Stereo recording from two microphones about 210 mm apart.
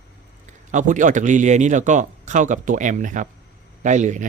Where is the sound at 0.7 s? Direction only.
35° right (ahead or behind).